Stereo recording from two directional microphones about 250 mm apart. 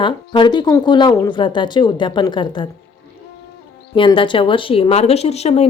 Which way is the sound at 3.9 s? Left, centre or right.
Centre.